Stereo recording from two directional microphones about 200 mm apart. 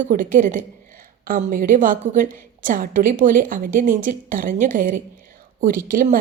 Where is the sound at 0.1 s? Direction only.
45° right (ahead or behind).